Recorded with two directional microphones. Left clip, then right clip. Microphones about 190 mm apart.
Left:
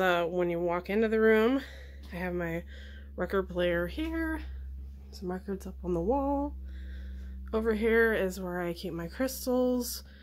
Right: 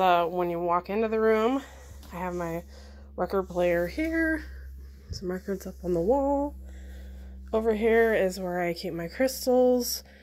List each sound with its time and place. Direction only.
0.0 s speech: 10° left (ahead or behind); by 3.5 s 25° left (ahead or behind)
3.5 s a woman's voice: centre (ahead or behind)
7.5 s a woman's voice: centre (ahead or behind)